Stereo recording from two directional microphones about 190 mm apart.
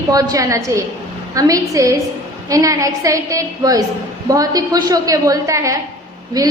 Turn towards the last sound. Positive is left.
turn(degrees=-20)  # may be behind; listen again after turning